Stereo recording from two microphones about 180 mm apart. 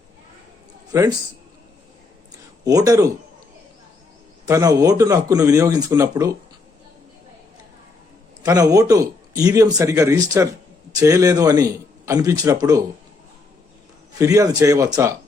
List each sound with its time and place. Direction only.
0.9 s a man's voice: 20° right (ahead or behind)
2.6 s speech: 20° right (ahead or behind)
4.4 s speech: 20° right (ahead or behind)
8.4 s speech: 20° right (ahead or behind)
14.2 s speech: 20° right (ahead or behind)